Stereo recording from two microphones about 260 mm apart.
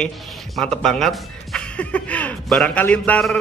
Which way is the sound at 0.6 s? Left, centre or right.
Centre.